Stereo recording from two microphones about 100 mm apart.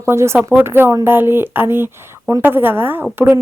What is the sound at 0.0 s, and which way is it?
Speech, 25° right (ahead or behind).